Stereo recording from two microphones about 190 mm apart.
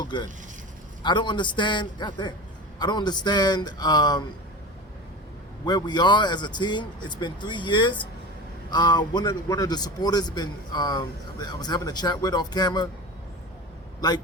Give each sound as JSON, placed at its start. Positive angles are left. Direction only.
{"t": 0.0, "sound": "a man's voice", "side_deg": 25}
{"t": 5.6, "sound": "a man's voice", "side_deg": 20}